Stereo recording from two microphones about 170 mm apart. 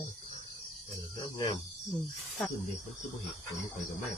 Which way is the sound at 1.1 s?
25° left (ahead or behind).